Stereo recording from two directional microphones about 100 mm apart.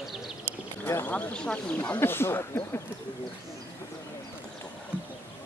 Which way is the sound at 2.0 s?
25° left (ahead or behind).